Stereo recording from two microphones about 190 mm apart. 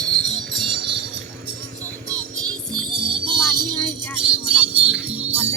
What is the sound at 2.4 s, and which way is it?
Music, 25° right (ahead or behind).